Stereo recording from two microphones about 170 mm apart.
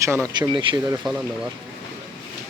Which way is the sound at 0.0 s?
20° right (ahead or behind).